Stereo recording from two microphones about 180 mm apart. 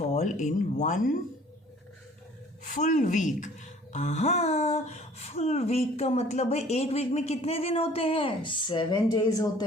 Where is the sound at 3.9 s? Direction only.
40° left (ahead or behind).